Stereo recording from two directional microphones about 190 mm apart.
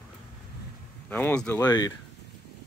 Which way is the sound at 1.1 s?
10° left (ahead or behind).